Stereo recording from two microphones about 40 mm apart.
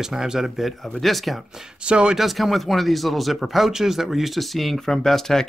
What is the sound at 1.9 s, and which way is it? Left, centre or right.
Speech, right.